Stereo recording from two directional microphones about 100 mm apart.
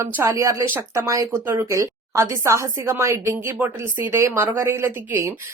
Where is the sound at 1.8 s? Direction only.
35° right (ahead or behind).